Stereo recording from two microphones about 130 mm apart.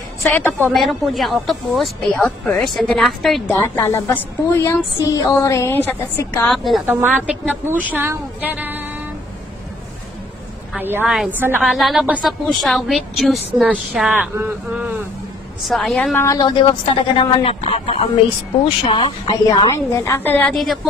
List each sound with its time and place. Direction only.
0.2 s a woman's voice: 15° left (ahead or behind)
0.7 s a woman's voice: centre (ahead or behind)
3.4 s a woman's voice: 20° left (ahead or behind)
6.5 s a woman's voice: centre (ahead or behind)
6.9 s a woman's voice: 15° right (ahead or behind)
10.8 s a woman's voice: 15° right (ahead or behind)
11.6 s a woman's voice: centre (ahead or behind)
15.6 s a woman's voice: centre (ahead or behind)
16.0 s a woman's voice: 10° left (ahead or behind)
16.3 s a woman's voice: 30° left (ahead or behind)
17.2 s a man's voice: 45° left (ahead or behind)
18.9 s a woman's voice: 40° left (ahead or behind)
19.7 s a woman's voice: 20° left (ahead or behind)
20.5 s a woman's voice: centre (ahead or behind)